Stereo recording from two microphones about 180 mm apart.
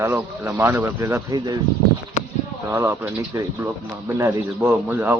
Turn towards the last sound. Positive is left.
turn(degrees=-10)  # may be behind; listen again after turning